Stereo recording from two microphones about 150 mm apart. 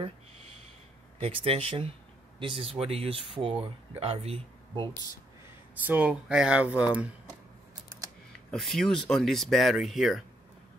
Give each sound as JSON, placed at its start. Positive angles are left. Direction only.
{"t": 1.2, "sound": "speech", "side_deg": -40}
{"t": 5.8, "sound": "speech", "side_deg": -10}
{"t": 8.5, "sound": "speech", "side_deg": 0}